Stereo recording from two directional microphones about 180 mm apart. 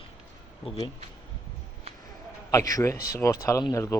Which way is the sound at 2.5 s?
20° left (ahead or behind).